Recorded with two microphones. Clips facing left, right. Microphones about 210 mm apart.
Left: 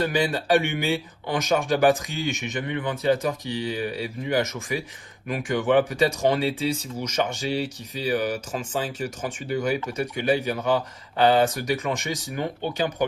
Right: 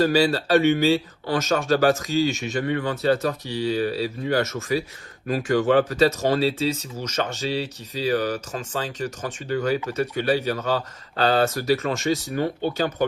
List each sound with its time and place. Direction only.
0.1 s speech: 15° left (ahead or behind)